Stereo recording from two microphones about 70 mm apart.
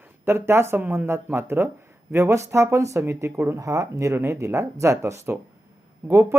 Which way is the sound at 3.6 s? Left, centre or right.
Right.